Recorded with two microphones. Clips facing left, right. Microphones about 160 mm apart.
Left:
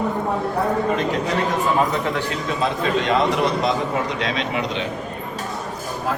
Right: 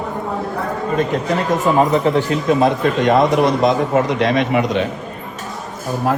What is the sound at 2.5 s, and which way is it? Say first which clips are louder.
A man's voice: right 6 dB; 50° right (ahead or behind).